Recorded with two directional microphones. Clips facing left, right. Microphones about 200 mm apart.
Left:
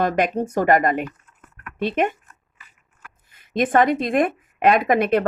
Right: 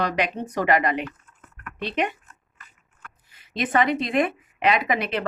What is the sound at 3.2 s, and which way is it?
Speech, 50° left (ahead or behind).